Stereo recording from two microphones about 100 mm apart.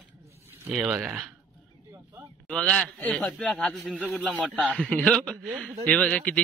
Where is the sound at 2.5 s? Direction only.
10° left (ahead or behind).